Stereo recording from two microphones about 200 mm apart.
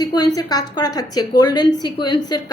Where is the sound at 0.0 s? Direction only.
20° left (ahead or behind).